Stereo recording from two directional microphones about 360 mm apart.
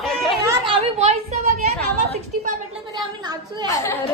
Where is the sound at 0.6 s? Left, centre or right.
Centre.